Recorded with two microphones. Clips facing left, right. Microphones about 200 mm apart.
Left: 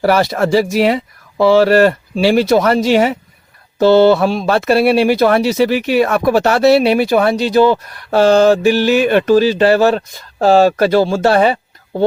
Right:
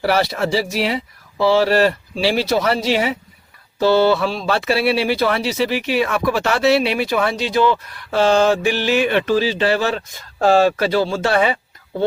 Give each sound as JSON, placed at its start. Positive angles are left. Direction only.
{"t": 0.0, "sound": "speech", "side_deg": 45}